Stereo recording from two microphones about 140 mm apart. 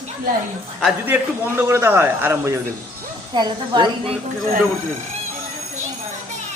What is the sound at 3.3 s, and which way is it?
Speech, 30° right (ahead or behind).